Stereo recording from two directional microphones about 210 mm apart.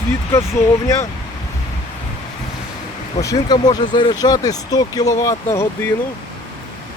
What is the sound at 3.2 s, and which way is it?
Speech, 15° left (ahead or behind).